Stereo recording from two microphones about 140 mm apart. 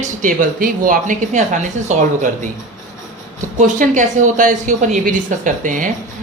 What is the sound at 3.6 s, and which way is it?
Speech, 65° right (ahead or behind).